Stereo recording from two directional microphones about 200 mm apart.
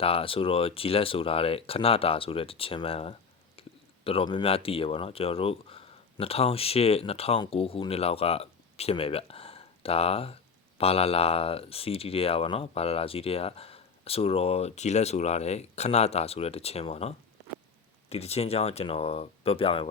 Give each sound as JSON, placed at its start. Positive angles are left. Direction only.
{"t": 0.0, "sound": "speech", "side_deg": 30}